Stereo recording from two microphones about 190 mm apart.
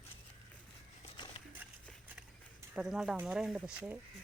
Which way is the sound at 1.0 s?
25° left (ahead or behind).